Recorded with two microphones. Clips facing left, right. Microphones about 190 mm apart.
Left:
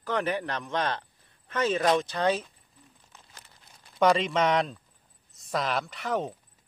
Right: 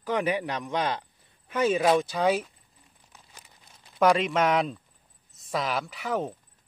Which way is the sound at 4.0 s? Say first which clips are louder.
Right 1 dB; centre (ahead or behind).